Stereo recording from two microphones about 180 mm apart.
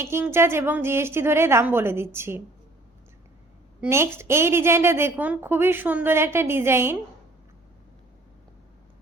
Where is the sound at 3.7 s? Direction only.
15° right (ahead or behind).